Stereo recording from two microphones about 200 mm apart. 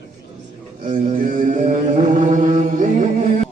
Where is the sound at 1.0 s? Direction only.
40° right (ahead or behind).